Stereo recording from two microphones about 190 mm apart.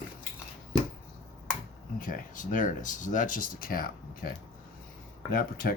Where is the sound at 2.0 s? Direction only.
45° left (ahead or behind).